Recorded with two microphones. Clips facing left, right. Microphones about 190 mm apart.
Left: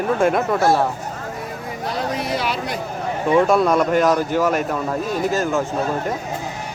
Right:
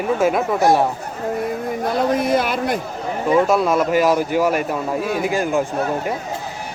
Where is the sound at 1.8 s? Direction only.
50° right (ahead or behind).